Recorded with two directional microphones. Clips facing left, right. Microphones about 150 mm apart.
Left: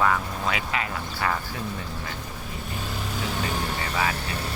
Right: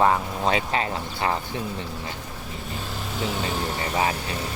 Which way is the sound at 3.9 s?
30° right (ahead or behind).